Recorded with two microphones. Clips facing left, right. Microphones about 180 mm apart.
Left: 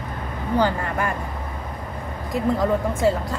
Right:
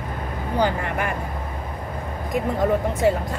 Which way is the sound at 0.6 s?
15° right (ahead or behind).